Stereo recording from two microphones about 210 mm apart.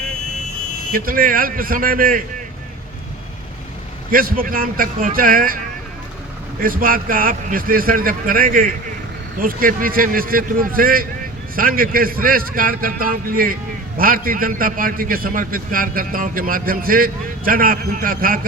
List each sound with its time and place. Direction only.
0.9 s a man's voice: 45° right (ahead or behind)
4.1 s a man's voice: 45° right (ahead or behind)
6.6 s a man's voice: 40° right (ahead or behind)